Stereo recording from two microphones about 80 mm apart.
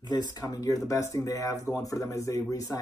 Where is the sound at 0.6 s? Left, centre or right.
Left.